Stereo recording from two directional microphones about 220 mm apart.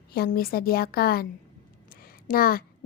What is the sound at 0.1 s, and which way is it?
A woman's voice, 45° left (ahead or behind).